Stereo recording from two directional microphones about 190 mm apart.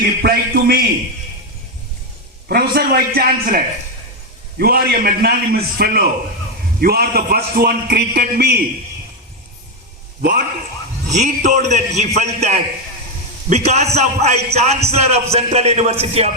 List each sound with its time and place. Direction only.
0.2 s a man's voice: 55° right (ahead or behind)
2.5 s a man's voice: 55° right (ahead or behind)
10.2 s a man's voice: 45° right (ahead or behind)